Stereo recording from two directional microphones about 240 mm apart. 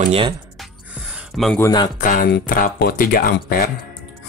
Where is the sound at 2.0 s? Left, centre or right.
Left.